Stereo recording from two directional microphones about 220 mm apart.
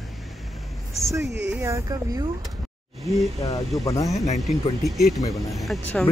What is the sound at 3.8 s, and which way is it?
Speech, 15° left (ahead or behind).